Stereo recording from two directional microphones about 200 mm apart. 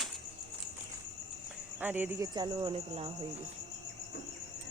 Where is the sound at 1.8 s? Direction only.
10° right (ahead or behind); by 3.1 s 30° right (ahead or behind).